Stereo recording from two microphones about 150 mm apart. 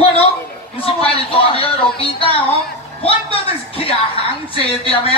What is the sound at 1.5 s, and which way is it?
Music, 40° left (ahead or behind).